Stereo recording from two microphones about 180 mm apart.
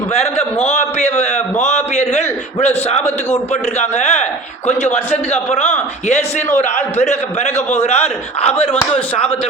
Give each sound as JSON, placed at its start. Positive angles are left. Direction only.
{"t": 0.1, "sound": "a man's voice", "side_deg": 35}
{"t": 6.6, "sound": "a man's voice", "side_deg": 40}
{"t": 8.7, "sound": "speech", "side_deg": 5}